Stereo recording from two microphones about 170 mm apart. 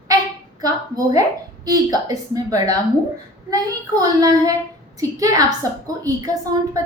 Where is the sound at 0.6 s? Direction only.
20° right (ahead or behind).